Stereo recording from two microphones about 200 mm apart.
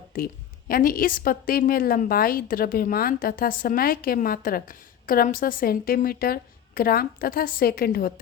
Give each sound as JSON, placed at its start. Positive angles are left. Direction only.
{"t": 0.7, "sound": "a woman's voice", "side_deg": 45}